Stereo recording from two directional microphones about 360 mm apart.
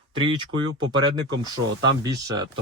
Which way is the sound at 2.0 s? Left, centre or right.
Centre.